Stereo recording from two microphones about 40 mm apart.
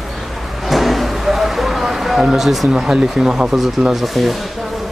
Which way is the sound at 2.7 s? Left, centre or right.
Centre.